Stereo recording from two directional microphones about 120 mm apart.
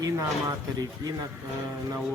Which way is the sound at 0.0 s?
25° right (ahead or behind).